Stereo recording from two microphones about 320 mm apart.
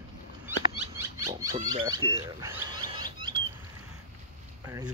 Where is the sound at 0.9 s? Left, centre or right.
Centre.